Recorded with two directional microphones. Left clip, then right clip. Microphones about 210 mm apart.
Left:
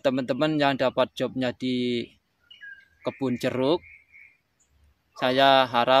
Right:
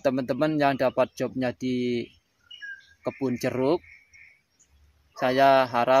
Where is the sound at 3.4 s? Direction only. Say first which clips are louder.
Left 1 dB; 5° left (ahead or behind).